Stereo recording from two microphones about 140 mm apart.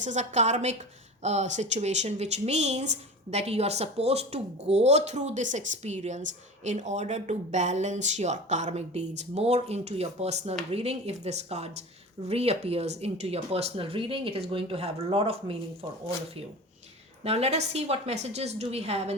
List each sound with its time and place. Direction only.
0.0 s a woman's voice: 60° right (ahead or behind); by 15.9 s 40° right (ahead or behind)
17.2 s speech: 45° right (ahead or behind)